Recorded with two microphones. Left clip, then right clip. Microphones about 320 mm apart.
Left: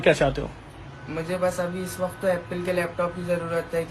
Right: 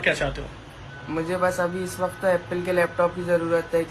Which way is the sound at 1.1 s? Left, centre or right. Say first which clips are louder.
Right 2 dB; centre.